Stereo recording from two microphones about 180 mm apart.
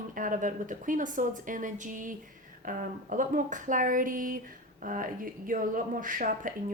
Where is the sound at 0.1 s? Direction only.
50° right (ahead or behind).